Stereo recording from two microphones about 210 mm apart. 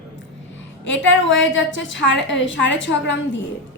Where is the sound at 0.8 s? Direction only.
60° left (ahead or behind).